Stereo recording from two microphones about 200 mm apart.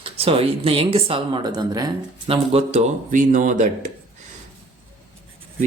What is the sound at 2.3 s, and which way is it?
Speech, 35° right (ahead or behind).